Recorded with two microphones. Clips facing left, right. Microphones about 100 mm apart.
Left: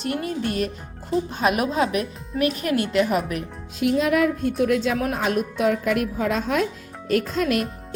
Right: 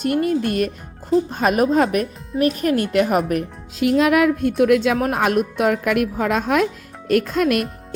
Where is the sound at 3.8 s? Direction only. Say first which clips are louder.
Right 4 dB; 90° right; by 5.0 s 70° right (ahead or behind).